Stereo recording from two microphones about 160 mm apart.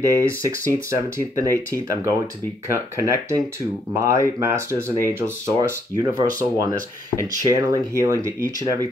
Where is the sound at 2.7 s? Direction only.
20° right (ahead or behind).